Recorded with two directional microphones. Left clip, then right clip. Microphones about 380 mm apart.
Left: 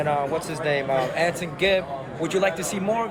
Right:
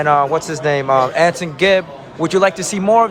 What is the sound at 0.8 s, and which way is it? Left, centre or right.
Speech, right.